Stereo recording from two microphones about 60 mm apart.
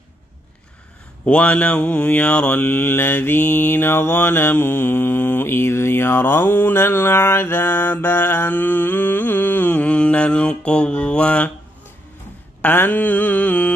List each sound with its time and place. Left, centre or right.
1.2 s mantra: left
9.8 s mantra: centre
12.6 s mantra: left